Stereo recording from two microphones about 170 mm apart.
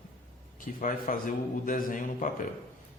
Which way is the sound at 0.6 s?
55° left (ahead or behind).